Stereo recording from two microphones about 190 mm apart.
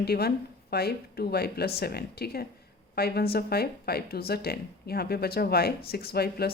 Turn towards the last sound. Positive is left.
turn(degrees=55)  # may be behind; listen again after turning